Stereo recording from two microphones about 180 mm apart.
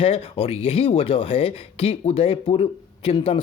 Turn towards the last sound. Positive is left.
turn(degrees=30)  # may be behind; listen again after turning